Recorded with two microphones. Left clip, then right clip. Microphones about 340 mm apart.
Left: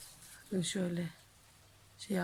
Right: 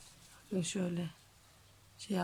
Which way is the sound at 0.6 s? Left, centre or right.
Centre.